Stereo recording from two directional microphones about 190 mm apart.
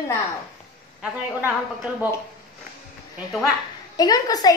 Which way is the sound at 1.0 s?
10° right (ahead or behind).